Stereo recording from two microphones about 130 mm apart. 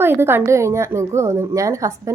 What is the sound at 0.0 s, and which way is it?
A woman's voice, 15° right (ahead or behind).